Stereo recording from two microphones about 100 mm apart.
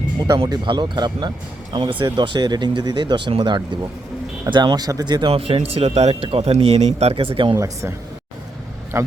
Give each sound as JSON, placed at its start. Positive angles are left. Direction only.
{"t": 0.4, "sound": "speech", "side_deg": -45}
{"t": 5.3, "sound": "speech", "side_deg": -70}
{"t": 7.5, "sound": "speech", "side_deg": -30}